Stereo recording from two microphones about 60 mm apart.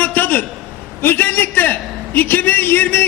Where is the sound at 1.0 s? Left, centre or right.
Left.